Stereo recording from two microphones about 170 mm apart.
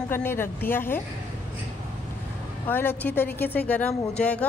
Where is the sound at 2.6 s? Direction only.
10° left (ahead or behind).